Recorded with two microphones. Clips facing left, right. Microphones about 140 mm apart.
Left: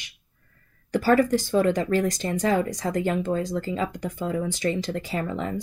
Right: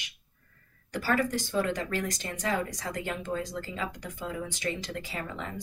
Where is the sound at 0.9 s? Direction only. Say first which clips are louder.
Left 9 dB; 35° left (ahead or behind).